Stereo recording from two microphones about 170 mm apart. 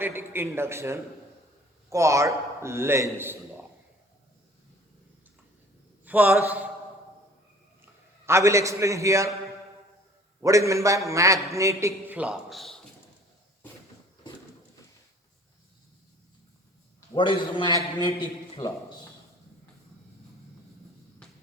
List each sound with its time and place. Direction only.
0.0 s a man's voice: 15° right (ahead or behind)
6.1 s a man's voice: 10° right (ahead or behind)
8.3 s a man's voice: 15° right (ahead or behind)
10.4 s a man's voice: 20° right (ahead or behind); by 12.8 s centre (ahead or behind)
17.2 s a man's voice: 30° left (ahead or behind)
21.2 s a sound: 5° left (ahead or behind)